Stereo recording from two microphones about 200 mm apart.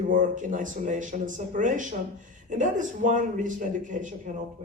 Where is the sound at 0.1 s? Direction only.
40° right (ahead or behind).